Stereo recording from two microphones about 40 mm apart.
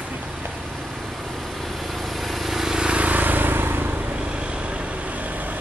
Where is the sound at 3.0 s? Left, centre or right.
Right.